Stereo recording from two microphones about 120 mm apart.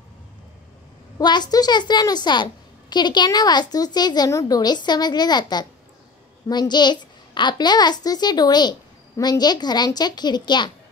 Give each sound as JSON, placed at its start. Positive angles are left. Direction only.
{"t": 1.1, "sound": "a woman's voice", "side_deg": 35}